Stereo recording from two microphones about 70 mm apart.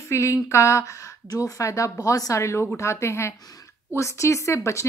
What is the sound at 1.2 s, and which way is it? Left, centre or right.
Speech, left.